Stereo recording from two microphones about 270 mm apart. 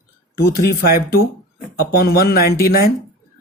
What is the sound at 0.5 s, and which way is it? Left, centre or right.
Speech, left.